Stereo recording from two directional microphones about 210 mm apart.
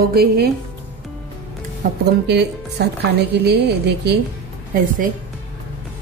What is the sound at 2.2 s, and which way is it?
A woman's voice, 50° right (ahead or behind).